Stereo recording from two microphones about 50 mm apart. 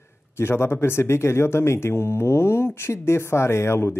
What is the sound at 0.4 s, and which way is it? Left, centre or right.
Speech, left.